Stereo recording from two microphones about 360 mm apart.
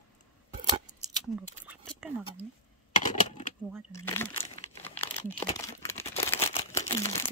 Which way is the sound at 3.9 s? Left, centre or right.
Centre.